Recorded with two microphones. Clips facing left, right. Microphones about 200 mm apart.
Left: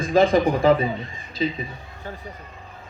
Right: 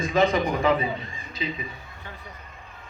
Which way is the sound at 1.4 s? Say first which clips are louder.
Left 7 dB; 35° left (ahead or behind).